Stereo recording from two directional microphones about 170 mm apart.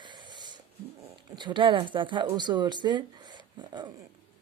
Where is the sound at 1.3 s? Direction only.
25° right (ahead or behind).